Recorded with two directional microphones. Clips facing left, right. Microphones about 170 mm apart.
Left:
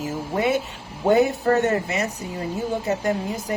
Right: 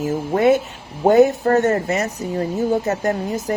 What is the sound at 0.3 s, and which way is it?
Speech, 50° right (ahead or behind).